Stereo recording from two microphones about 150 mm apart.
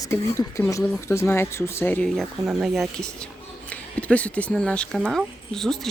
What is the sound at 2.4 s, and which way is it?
Speech, 5° right (ahead or behind).